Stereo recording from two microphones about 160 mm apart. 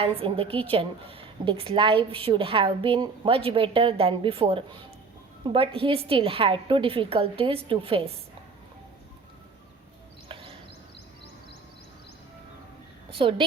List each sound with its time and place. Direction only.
0.0 s a woman's voice: 35° right (ahead or behind)
10.2 s a sound: 35° right (ahead or behind)
13.1 s a woman's voice: 35° right (ahead or behind)